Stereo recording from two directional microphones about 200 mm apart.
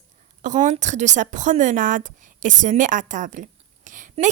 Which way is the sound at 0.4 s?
35° right (ahead or behind).